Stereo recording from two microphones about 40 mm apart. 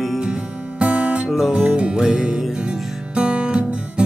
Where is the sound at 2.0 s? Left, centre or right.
Centre.